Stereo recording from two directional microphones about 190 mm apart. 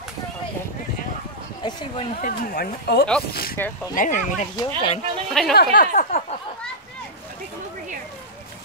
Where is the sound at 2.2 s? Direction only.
50° left (ahead or behind).